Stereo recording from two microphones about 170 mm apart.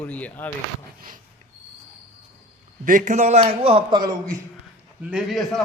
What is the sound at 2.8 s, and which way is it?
A man's voice, 50° right (ahead or behind).